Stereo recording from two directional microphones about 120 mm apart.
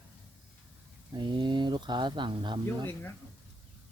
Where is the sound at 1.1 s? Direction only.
40° right (ahead or behind).